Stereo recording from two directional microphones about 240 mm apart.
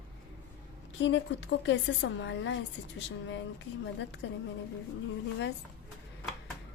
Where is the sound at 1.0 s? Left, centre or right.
Left.